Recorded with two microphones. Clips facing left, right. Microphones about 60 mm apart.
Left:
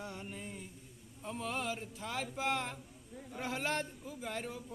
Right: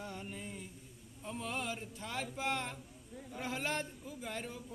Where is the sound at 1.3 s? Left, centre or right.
Left.